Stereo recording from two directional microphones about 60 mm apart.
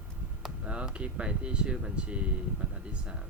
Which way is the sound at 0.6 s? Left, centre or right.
Centre.